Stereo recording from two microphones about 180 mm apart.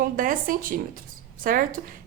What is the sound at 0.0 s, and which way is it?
A woman's voice, 50° right (ahead or behind).